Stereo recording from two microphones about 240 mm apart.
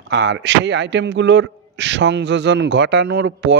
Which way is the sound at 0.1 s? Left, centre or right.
Right.